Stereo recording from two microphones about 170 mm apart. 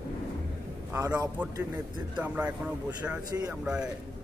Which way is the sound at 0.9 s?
20° right (ahead or behind).